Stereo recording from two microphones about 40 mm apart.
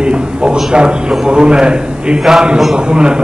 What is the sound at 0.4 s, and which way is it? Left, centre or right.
A man's voice, right.